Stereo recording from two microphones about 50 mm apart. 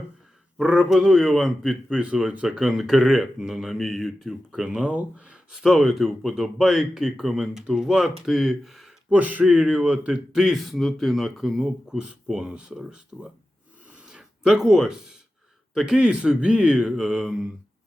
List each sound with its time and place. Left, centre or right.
0.5 s speech: centre
1.3 s speech: centre
2.1 s speech: centre
4.3 s speech: centre
5.5 s speech: centre
9.0 s speech: right
10.3 s speech: centre
10.6 s speech: centre
11.9 s speech: centre
16.0 s speech: centre